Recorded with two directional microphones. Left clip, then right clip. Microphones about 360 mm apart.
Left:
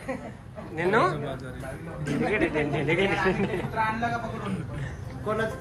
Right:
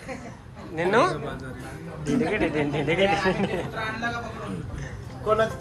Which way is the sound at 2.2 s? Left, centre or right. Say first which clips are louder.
Left 1 dB; centre.